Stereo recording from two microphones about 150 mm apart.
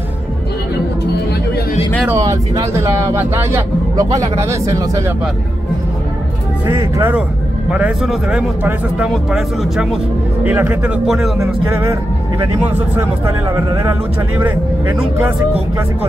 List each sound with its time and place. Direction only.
2.0 s speech: 20° right (ahead or behind)
6.7 s speech: 15° right (ahead or behind); by 9.9 s centre (ahead or behind)
10.4 s speech: 10° right (ahead or behind)
14.4 s speech: 15° right (ahead or behind)